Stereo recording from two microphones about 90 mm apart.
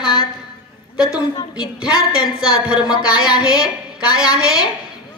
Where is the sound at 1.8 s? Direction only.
10° right (ahead or behind).